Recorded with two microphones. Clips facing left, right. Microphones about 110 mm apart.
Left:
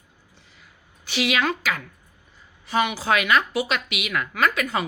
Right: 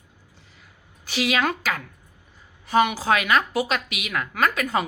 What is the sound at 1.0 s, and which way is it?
A woman's voice, 35° right (ahead or behind).